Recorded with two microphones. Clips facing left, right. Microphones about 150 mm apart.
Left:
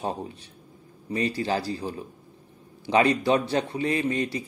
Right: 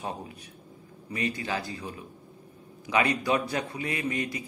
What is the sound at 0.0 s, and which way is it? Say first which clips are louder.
Speech: left 5 dB; 30° left (ahead or behind).